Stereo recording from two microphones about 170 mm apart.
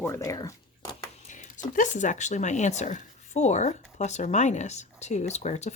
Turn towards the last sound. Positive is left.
turn(degrees=40)  # may be behind; listen again after turning